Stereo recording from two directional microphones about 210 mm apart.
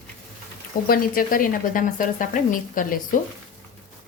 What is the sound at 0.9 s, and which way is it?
A woman's voice, 40° left (ahead or behind).